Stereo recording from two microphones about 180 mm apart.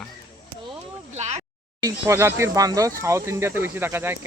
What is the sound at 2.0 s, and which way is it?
Speech, 15° right (ahead or behind).